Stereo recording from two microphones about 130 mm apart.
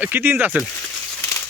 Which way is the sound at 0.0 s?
15° right (ahead or behind).